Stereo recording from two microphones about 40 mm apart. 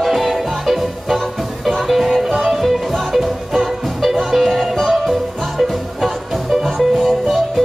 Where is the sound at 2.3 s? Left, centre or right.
Centre.